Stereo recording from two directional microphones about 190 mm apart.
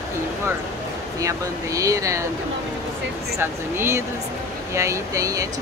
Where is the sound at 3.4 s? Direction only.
10° right (ahead or behind).